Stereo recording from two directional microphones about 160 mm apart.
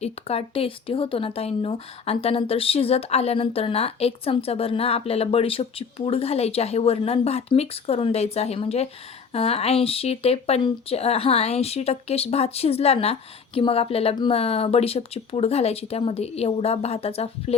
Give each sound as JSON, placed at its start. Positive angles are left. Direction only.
{"t": 0.0, "sound": "speech", "side_deg": 40}